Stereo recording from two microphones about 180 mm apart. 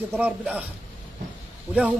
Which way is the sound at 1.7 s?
5° right (ahead or behind).